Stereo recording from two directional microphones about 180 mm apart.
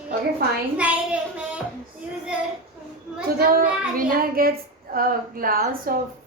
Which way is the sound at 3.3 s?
55° right (ahead or behind).